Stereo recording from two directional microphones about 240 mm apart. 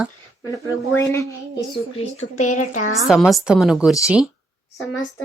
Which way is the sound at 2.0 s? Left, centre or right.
Left.